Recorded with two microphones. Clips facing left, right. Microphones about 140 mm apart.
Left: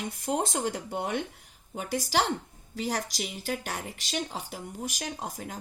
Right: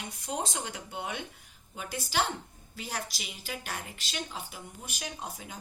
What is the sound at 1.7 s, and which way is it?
Speech, 75° left (ahead or behind).